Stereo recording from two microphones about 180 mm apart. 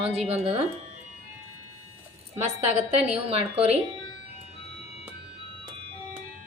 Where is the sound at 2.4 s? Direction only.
35° right (ahead or behind).